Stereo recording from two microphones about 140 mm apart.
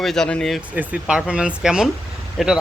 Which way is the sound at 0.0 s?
5° left (ahead or behind).